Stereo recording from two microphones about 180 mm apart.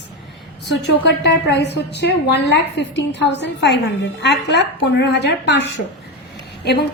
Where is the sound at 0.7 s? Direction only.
75° left (ahead or behind).